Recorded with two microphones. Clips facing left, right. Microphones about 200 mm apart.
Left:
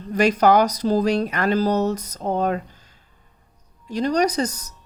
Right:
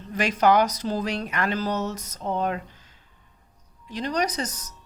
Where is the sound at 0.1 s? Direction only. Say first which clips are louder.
Left 4 dB; 40° left (ahead or behind).